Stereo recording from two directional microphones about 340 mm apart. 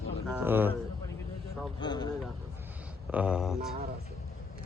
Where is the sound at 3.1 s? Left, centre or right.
Centre.